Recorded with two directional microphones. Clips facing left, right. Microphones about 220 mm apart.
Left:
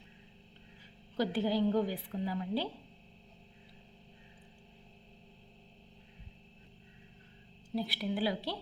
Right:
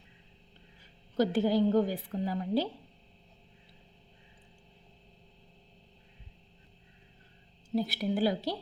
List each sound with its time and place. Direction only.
1.1 s a woman's voice: 45° right (ahead or behind)
7.8 s a woman's voice: 45° right (ahead or behind)